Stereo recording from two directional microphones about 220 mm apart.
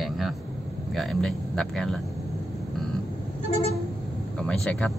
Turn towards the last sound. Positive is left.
turn(degrees=5)  # may be behind; listen again after turning